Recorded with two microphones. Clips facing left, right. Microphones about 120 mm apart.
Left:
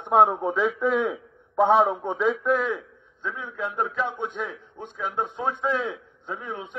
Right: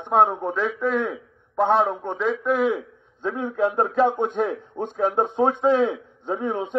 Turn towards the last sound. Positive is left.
turn(degrees=-30)  # may be behind; listen again after turning